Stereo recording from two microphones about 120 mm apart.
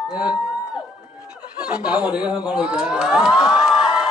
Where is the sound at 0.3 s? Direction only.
5° right (ahead or behind).